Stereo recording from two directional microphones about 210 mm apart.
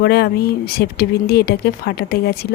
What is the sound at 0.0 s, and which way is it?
Speech, 50° left (ahead or behind).